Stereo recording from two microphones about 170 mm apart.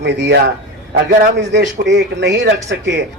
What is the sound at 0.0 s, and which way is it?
Speech, 90° right.